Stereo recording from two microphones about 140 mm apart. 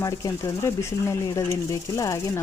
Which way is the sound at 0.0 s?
25° left (ahead or behind).